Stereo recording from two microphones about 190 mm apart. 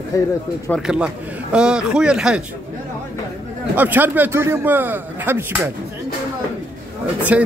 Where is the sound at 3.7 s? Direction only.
10° right (ahead or behind).